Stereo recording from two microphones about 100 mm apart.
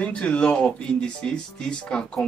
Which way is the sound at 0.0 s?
10° left (ahead or behind).